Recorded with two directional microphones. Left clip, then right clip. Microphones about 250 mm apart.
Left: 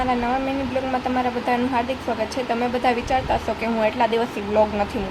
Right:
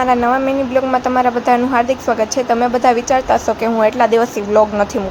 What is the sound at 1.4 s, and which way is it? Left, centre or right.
A woman's voice, right.